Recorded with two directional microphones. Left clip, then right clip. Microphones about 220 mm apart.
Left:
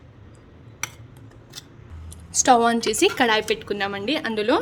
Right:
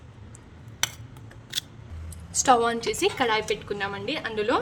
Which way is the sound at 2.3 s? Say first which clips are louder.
Left 4 dB; 20° left (ahead or behind).